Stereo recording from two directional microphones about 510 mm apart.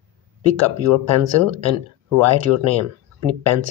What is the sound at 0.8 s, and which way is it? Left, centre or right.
Speech, right.